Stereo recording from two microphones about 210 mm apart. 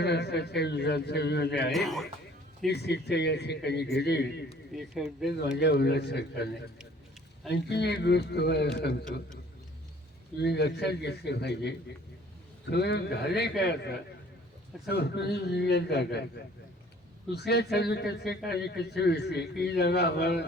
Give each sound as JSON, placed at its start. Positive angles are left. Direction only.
{"t": 0.0, "sound": "a man's voice", "side_deg": 55}
{"t": 1.7, "sound": "speech", "side_deg": 0}
{"t": 2.6, "sound": "a man's voice", "side_deg": 50}
{"t": 4.7, "sound": "speech", "side_deg": 0}
{"t": 5.5, "sound": "a man's voice", "side_deg": 55}
{"t": 7.5, "sound": "a man's voice", "side_deg": 50}
{"t": 10.3, "sound": "a man's voice", "side_deg": 55}